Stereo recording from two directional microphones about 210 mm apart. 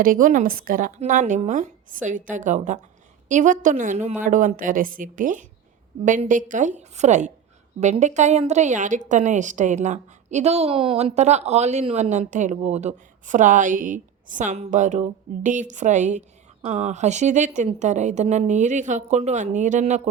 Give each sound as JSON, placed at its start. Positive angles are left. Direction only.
{"t": 0.0, "sound": "a woman's voice", "side_deg": -40}